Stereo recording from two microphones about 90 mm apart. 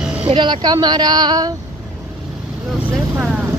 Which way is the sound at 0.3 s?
60° right (ahead or behind).